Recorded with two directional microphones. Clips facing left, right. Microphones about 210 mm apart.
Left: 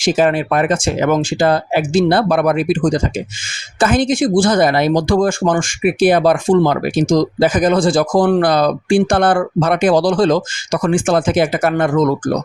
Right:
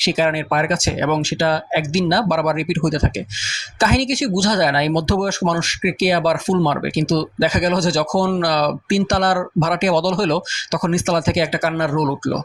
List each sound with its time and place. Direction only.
0.0 s speech: 50° left (ahead or behind)